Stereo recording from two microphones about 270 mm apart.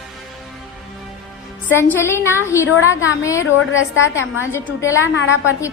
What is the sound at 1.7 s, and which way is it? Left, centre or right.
A woman's voice, centre.